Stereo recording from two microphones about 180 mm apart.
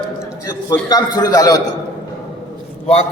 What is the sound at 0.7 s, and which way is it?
Speech, 20° left (ahead or behind).